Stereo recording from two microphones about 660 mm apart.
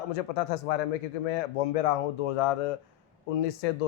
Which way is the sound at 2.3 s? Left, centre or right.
Left.